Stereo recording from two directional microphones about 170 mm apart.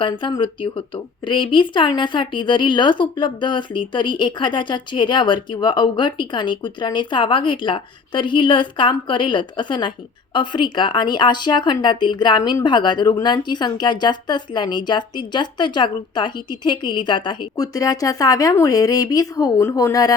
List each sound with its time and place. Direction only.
0.0 s speech: 30° left (ahead or behind)